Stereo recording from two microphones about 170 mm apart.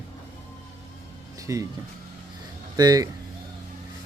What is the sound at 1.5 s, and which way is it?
Speech, 15° right (ahead or behind).